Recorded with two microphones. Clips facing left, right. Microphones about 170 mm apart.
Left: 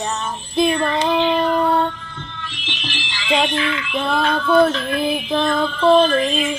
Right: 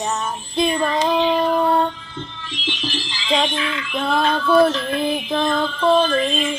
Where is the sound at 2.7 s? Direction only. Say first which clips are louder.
Right 4 dB; 70° left (ahead or behind).